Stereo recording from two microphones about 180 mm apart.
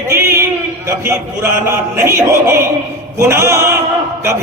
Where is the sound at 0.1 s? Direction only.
15° right (ahead or behind).